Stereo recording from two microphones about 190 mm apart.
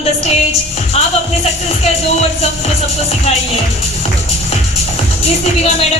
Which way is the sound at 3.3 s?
30° left (ahead or behind).